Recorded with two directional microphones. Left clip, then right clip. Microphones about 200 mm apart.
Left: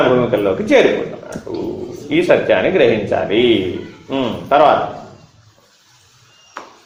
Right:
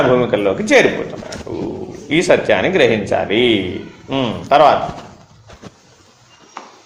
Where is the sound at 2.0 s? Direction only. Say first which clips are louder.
Even; 35° right (ahead or behind).